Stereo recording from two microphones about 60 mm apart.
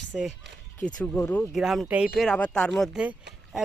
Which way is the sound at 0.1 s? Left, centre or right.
Centre.